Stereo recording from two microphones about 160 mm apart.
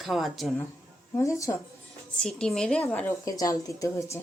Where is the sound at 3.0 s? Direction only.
20° left (ahead or behind).